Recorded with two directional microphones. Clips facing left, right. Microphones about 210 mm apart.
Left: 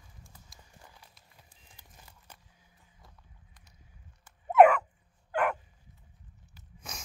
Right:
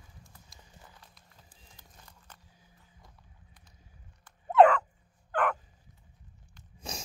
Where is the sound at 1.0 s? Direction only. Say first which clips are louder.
Right 1 dB; 10° left (ahead or behind).